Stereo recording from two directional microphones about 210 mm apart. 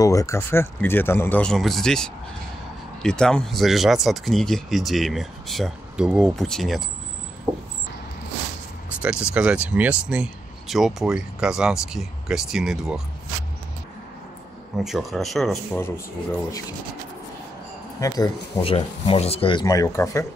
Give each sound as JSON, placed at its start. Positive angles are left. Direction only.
{"t": 0.0, "sound": "speech", "side_deg": 15}
{"t": 9.0, "sound": "speech", "side_deg": -5}
{"t": 14.8, "sound": "speech", "side_deg": 0}
{"t": 18.0, "sound": "speech", "side_deg": 15}